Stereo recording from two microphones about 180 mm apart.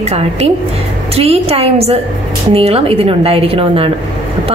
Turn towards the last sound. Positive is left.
turn(degrees=-30)  # may be behind; listen again after turning